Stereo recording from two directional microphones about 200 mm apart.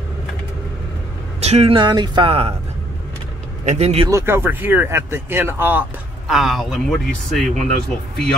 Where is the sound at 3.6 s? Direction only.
35° right (ahead or behind).